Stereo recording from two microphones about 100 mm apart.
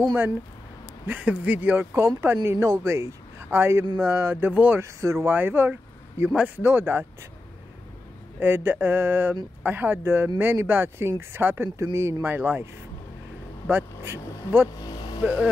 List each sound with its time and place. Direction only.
1.0 s a man's voice: 15° right (ahead or behind)
6.3 s speech: 10° right (ahead or behind)
6.6 s speech: 20° right (ahead or behind)
8.4 s speech: 25° right (ahead or behind)
13.7 s vehicle: 25° right (ahead or behind)
14.8 s vehicle: 40° left (ahead or behind)
15.2 s speech: 15° right (ahead or behind)